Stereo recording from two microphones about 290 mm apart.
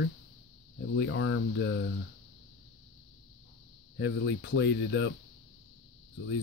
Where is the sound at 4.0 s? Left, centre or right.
Left.